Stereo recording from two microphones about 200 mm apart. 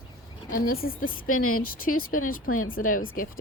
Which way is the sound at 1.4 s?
90° left.